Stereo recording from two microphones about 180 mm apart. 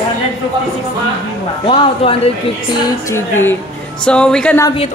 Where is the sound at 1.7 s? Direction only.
30° left (ahead or behind).